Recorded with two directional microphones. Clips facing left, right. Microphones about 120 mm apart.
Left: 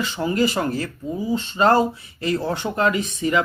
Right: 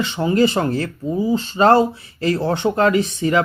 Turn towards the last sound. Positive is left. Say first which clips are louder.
# right 4 dB
turn(degrees=-30)  # may be behind; listen again after turning